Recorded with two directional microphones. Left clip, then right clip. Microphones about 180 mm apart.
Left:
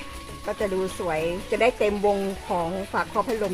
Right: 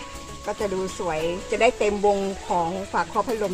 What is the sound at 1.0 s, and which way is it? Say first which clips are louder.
Speech: even; 20° right (ahead or behind).